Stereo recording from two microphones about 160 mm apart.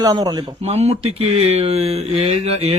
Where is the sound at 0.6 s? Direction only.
40° right (ahead or behind).